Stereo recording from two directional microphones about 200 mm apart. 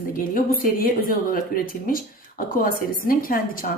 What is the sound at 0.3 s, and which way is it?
Mantra, 45° left (ahead or behind).